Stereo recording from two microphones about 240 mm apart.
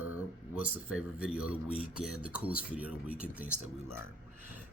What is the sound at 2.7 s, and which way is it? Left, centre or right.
Speech, centre.